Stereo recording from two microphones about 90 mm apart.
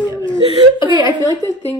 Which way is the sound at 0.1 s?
60° left (ahead or behind).